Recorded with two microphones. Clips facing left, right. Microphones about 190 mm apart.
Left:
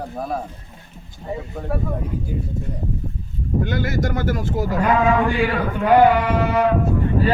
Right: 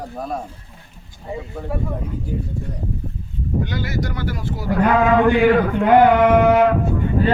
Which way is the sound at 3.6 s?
50° left (ahead or behind).